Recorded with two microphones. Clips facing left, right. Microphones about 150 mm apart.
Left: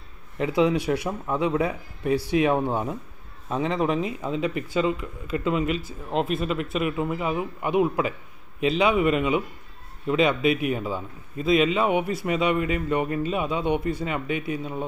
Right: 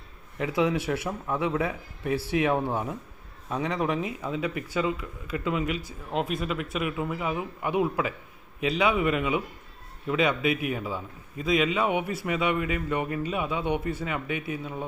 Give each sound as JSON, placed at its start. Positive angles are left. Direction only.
{"t": 0.4, "sound": "speech", "side_deg": 20}